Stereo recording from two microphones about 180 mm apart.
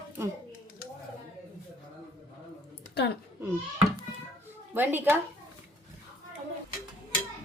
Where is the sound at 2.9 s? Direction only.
65° left (ahead or behind).